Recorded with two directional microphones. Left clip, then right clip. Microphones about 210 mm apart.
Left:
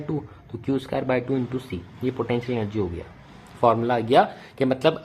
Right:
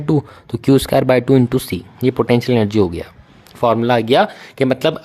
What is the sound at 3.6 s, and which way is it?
Speech, 45° right (ahead or behind).